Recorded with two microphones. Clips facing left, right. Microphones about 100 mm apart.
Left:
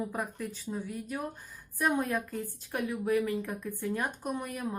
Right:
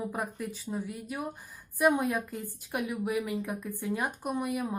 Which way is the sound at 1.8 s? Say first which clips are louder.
Right 3 dB; 15° right (ahead or behind).